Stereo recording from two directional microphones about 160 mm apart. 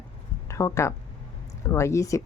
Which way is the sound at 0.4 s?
20° left (ahead or behind).